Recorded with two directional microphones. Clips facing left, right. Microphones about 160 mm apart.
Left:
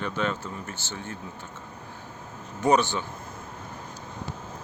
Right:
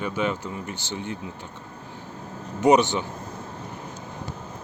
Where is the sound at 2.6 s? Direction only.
20° right (ahead or behind).